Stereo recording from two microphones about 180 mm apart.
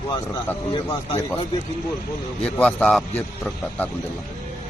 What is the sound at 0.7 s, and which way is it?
Speech, 25° left (ahead or behind).